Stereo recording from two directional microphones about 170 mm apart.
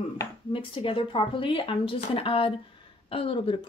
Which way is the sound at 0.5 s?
30° left (ahead or behind).